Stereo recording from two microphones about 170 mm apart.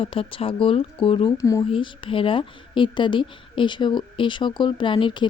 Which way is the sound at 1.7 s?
30° left (ahead or behind).